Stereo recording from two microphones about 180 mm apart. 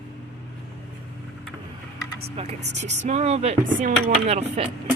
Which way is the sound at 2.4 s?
35° right (ahead or behind).